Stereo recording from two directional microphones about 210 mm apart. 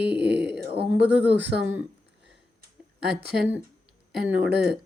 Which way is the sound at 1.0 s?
55° right (ahead or behind).